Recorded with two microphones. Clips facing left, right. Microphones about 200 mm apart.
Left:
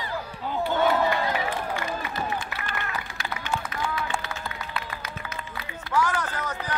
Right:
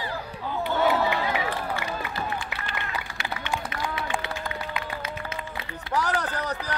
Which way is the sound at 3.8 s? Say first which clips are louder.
Even; 15° right (ahead or behind).